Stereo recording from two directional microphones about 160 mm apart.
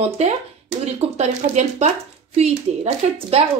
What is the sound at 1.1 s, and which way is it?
A woman's voice, 45° right (ahead or behind).